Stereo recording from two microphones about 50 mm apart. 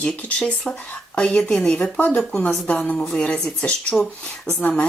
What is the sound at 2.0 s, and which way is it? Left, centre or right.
Speech, left.